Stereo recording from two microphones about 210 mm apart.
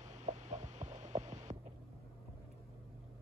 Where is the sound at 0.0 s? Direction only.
35° right (ahead or behind).